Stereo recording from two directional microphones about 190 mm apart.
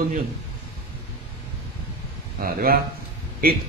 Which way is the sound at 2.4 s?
50° right (ahead or behind).